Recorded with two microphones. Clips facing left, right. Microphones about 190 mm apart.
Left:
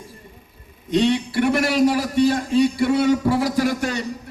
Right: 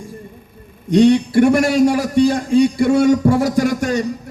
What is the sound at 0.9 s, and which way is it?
A man's voice, 45° right (ahead or behind).